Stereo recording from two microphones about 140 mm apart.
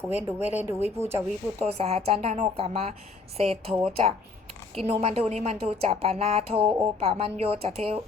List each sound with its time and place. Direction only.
0.3 s speech: 15° right (ahead or behind)
1.6 s speech: 50° right (ahead or behind)
6.6 s speech: 15° right (ahead or behind)
7.0 s speech: 45° right (ahead or behind)